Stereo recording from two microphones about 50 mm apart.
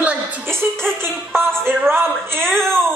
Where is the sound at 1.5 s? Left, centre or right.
Right.